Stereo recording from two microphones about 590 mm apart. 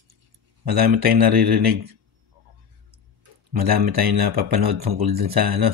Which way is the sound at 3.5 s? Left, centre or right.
Right.